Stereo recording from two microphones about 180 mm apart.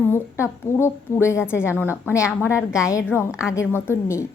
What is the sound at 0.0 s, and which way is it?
A woman's voice, 15° left (ahead or behind).